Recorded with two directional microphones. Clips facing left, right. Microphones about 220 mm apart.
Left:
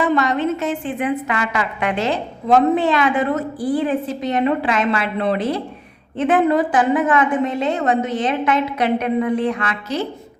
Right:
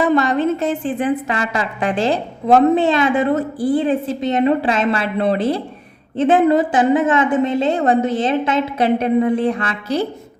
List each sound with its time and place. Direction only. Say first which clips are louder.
0.0 s a woman's voice: right 2 dB; 35° right (ahead or behind)